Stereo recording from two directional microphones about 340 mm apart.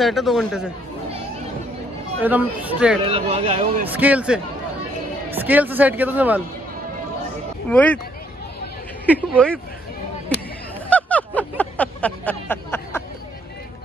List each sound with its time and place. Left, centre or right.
0.0 s speech: centre
2.2 s speech: centre
3.0 s speech: centre
3.8 s speech: centre
7.7 s speech: centre
9.0 s speech: centre
10.9 s a sound: centre